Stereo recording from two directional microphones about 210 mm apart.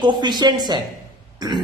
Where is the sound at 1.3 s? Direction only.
20° right (ahead or behind).